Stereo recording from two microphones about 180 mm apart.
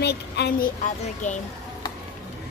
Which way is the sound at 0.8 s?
45° left (ahead or behind).